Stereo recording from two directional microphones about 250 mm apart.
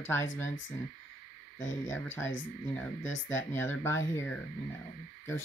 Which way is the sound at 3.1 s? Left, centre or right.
Left.